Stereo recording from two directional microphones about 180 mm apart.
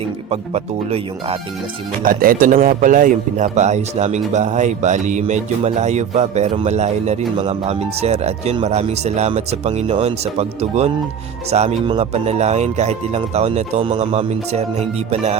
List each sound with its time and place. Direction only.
0.3 s speech: 35° right (ahead or behind)
2.0 s speech: 50° right (ahead or behind)